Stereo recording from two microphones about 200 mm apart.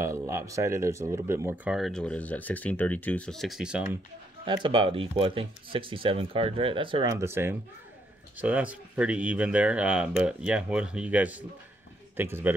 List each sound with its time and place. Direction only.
0.0 s speech: 15° right (ahead or behind)
4.6 s a man's voice: 25° right (ahead or behind)